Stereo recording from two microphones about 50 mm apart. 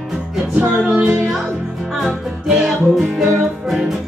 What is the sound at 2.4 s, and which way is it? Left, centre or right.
Music, centre.